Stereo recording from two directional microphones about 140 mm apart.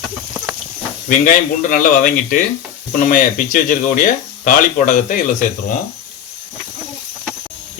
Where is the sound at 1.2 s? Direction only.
75° left (ahead or behind); by 2.3 s 90° left.